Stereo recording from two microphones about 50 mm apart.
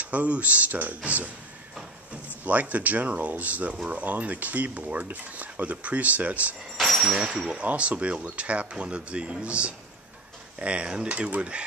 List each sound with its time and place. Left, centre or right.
0.0 s speech: right
2.4 s speech: right
6.8 s a sound: centre
7.2 s speech: centre
7.6 s speech: right